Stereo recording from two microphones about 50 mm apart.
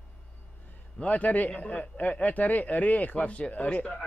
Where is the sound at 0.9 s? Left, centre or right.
Left.